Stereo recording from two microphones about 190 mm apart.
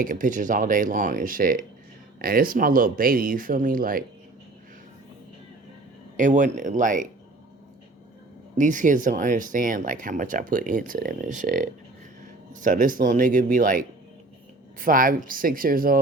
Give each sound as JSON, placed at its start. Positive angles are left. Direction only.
{"t": 0.0, "sound": "speech", "side_deg": -45}
{"t": 6.1, "sound": "speech", "side_deg": -40}
{"t": 8.5, "sound": "speech", "side_deg": -40}